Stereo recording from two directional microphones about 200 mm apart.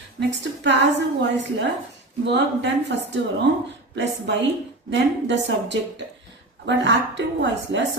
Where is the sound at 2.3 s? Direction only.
60° right (ahead or behind).